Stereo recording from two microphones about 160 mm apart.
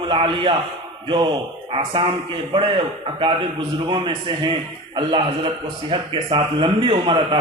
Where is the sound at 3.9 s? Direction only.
30° right (ahead or behind).